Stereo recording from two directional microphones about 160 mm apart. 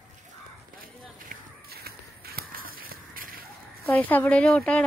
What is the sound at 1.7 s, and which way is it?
Crow, 70° right (ahead or behind).